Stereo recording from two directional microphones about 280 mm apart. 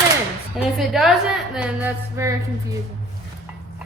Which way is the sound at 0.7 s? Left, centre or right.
Centre.